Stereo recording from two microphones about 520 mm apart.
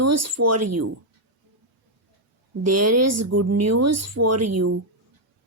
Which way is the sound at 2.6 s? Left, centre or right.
Right.